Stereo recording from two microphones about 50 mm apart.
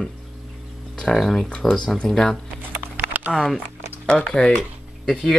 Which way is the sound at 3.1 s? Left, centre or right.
Right.